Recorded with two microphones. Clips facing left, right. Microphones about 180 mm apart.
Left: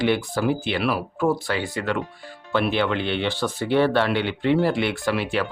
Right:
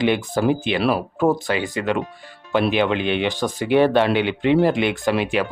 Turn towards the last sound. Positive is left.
turn(degrees=-15)  # may be behind; listen again after turning